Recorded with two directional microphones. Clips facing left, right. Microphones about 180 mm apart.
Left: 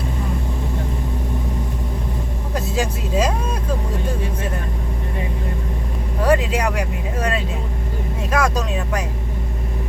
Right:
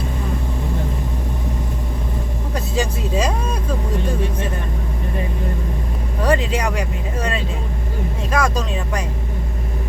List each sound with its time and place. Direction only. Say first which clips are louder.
2.7 s speech: even; 5° left (ahead or behind)
6.2 s speech: left 1 dB; 5° left (ahead or behind)